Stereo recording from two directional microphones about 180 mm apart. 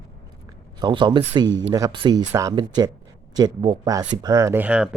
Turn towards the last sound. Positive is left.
turn(degrees=-5)  # may be behind; listen again after turning